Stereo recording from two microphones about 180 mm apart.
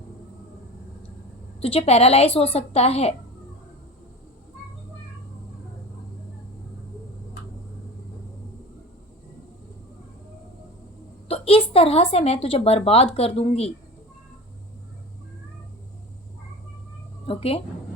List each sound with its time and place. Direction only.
1.6 s a woman's voice: 35° left (ahead or behind)
11.3 s a woman's voice: 30° left (ahead or behind)
17.2 s a woman's voice: 30° left (ahead or behind)